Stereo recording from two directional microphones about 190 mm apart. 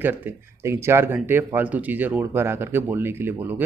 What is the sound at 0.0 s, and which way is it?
Speech, 10° right (ahead or behind).